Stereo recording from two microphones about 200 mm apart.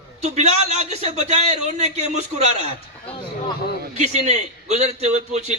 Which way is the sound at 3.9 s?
35° right (ahead or behind).